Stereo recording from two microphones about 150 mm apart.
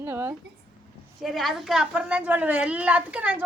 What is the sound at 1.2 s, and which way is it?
A woman's voice, centre (ahead or behind).